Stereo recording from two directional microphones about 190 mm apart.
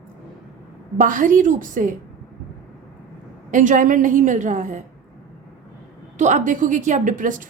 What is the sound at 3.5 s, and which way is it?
A woman's voice, 40° right (ahead or behind).